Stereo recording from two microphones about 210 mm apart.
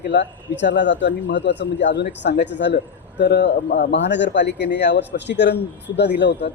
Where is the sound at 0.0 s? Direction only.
55° left (ahead or behind).